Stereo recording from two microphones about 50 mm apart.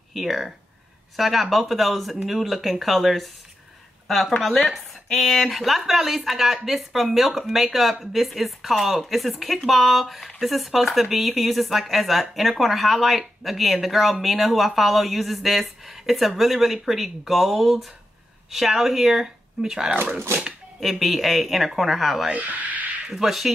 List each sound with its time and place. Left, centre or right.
0.1 s speech: centre
4.4 s speech: centre
22.3 s speech: right
23.0 s speech: centre